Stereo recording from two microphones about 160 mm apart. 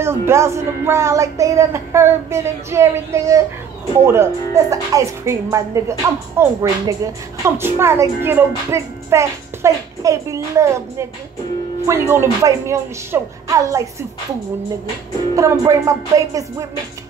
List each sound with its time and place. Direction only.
0.0 s a woman's voice: 15° right (ahead or behind)
15.3 s music: 20° right (ahead or behind)